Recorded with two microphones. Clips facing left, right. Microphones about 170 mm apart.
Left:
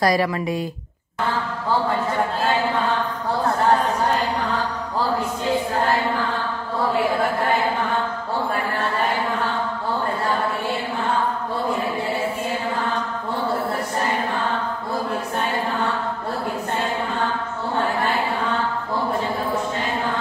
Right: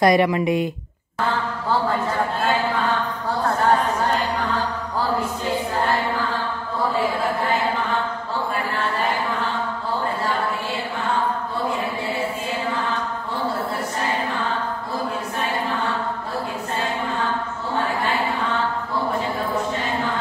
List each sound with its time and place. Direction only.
0.0 s speech: 20° right (ahead or behind)